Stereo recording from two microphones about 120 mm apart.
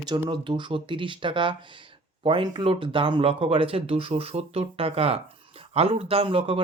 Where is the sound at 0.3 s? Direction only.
40° right (ahead or behind).